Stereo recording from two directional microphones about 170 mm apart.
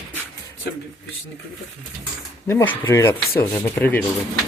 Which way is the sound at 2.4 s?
15° left (ahead or behind).